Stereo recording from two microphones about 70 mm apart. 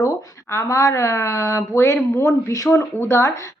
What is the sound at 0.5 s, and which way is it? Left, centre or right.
Speech, left.